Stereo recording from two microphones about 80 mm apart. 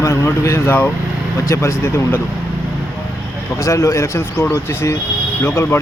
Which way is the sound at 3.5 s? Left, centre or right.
Left.